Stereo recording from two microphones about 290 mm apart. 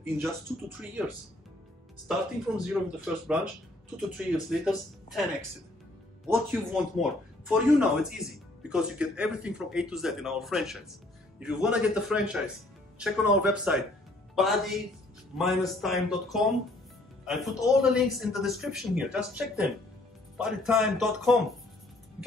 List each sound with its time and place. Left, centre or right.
2.0 s speech: centre
6.2 s speech: centre